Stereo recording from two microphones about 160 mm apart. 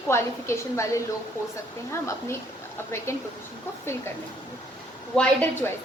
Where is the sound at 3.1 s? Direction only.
15° left (ahead or behind).